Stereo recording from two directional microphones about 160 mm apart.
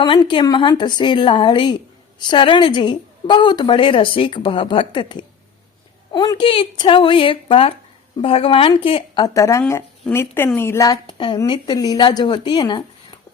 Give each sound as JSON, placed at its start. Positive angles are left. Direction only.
{"t": 0.0, "sound": "a woman's voice", "side_deg": 30}
{"t": 9.2, "sound": "speech", "side_deg": 20}
{"t": 10.9, "sound": "a woman's voice", "side_deg": 35}